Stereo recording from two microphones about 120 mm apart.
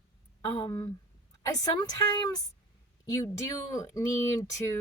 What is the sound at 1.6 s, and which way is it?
Speech, 35° left (ahead or behind).